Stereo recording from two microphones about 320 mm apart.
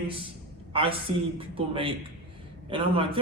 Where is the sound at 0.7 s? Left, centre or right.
Centre.